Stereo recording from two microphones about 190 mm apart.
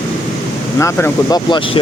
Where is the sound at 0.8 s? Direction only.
20° left (ahead or behind).